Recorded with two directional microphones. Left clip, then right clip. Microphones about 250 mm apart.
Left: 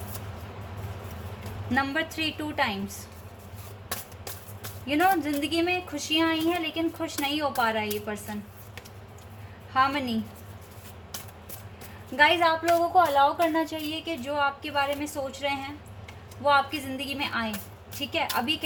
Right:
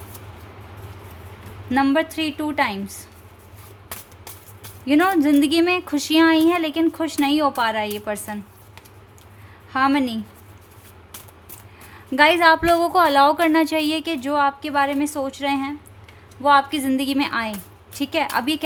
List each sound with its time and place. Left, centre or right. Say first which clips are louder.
1.7 s speech: right 8 dB; right
4.9 s speech: right 6 dB; right
9.7 s speech: right 5 dB; right
12.1 s speech: right 7 dB; right